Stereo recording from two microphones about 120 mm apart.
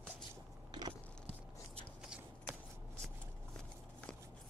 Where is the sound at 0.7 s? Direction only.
40° right (ahead or behind).